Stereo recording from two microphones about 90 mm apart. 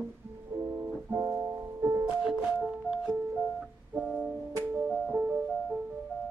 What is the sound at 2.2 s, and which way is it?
Music, 5° right (ahead or behind).